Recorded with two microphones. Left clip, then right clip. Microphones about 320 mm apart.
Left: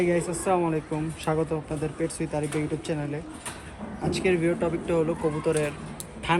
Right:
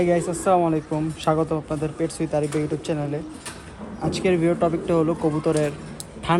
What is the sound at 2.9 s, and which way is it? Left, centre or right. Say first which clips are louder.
Speech: right 4 dB; right.